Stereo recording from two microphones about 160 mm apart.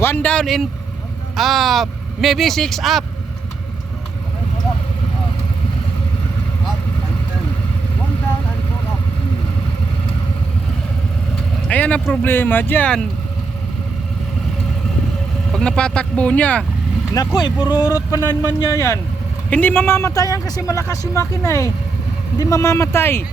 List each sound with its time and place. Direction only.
0.0 s speech: 10° left (ahead or behind)
11.7 s speech: 10° left (ahead or behind)
15.5 s speech: 5° left (ahead or behind)
17.2 s speech: 30° left (ahead or behind)
17.6 s speech: 15° right (ahead or behind)
18.7 s speech: 20° left (ahead or behind)